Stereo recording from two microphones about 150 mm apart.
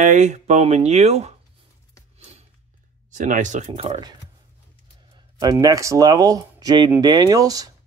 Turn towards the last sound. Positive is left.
turn(degrees=-25)  # may be behind; listen again after turning